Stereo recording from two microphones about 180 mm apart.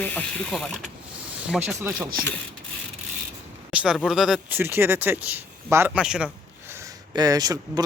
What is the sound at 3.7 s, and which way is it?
Speech, 5° right (ahead or behind).